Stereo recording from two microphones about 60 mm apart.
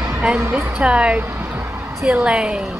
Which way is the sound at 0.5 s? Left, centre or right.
Right.